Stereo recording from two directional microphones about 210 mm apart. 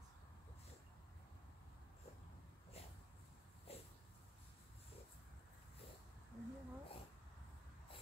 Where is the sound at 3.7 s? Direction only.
30° left (ahead or behind).